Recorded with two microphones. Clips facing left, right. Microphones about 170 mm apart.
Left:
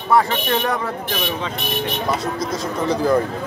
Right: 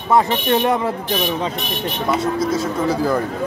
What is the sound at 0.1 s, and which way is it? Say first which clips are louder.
Speech: right 2 dB; 25° right (ahead or behind).